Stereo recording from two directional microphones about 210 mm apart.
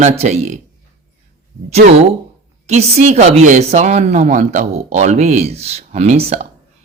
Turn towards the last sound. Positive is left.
turn(degrees=-30)  # may be behind; listen again after turning